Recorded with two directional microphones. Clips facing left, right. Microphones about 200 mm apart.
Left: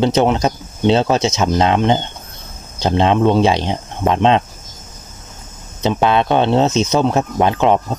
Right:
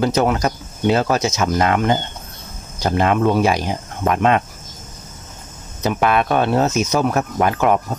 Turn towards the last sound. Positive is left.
turn(degrees=25)  # may be behind; listen again after turning